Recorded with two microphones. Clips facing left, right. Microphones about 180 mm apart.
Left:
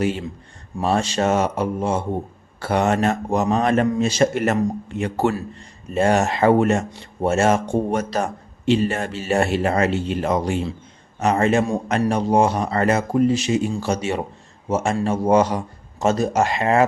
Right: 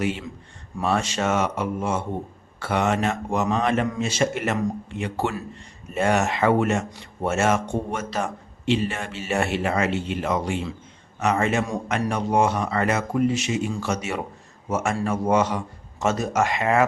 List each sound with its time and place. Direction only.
0.0 s speech: 35° left (ahead or behind)